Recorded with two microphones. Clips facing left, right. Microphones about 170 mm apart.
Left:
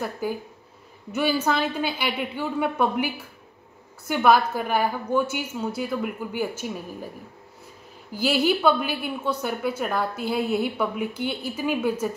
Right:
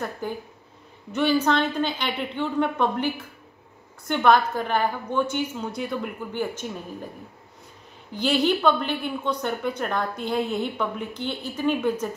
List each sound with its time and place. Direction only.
0.2 s a woman's voice: 5° left (ahead or behind)
4.1 s a woman's voice: 5° left (ahead or behind)
8.1 s a woman's voice: 5° left (ahead or behind)